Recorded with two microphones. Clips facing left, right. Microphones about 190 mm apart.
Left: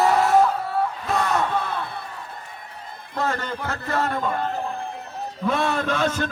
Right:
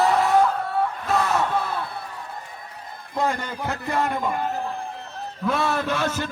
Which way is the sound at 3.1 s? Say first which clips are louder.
Right 1 dB; 15° right (ahead or behind).